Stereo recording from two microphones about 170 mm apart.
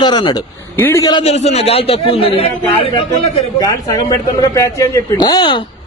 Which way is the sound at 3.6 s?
20° left (ahead or behind).